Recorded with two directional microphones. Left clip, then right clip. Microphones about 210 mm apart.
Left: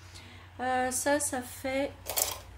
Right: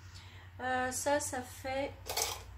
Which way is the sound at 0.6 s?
40° left (ahead or behind).